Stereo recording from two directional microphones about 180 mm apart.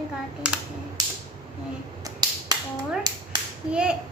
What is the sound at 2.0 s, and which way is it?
Finger snapping, 20° right (ahead or behind).